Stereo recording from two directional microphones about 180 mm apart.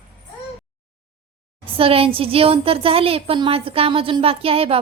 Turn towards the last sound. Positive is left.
turn(degrees=-30)  # may be behind; listen again after turning